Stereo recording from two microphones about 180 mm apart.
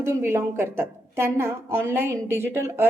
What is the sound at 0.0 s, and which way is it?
A woman's voice, 15° right (ahead or behind).